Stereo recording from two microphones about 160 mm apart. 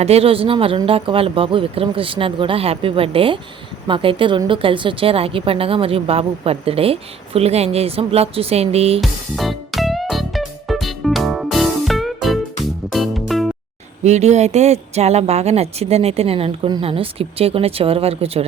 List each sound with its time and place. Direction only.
0.0 s a woman's voice: 40° right (ahead or behind)
9.0 s music: centre (ahead or behind)
14.0 s a woman's voice: 45° right (ahead or behind)